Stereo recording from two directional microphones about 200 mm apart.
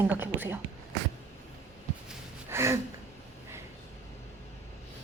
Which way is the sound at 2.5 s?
15° right (ahead or behind).